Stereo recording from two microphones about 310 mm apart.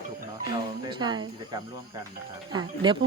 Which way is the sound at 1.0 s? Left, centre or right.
Centre.